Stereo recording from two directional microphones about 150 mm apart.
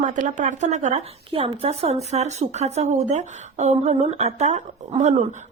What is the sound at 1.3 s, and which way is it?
A woman's voice, 40° right (ahead or behind).